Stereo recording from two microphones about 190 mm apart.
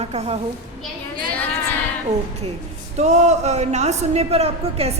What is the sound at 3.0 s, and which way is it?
A woman's voice, 35° right (ahead or behind).